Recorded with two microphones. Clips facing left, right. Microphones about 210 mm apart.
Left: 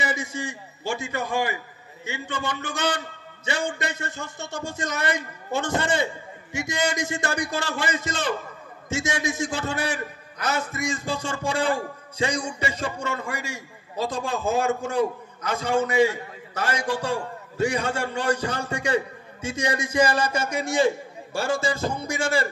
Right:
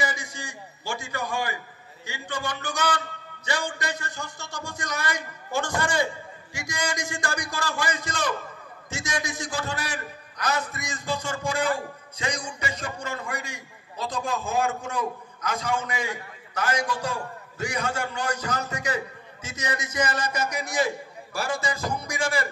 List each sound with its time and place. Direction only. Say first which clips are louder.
0.0 s a man's voice: left 3 dB; 25° left (ahead or behind)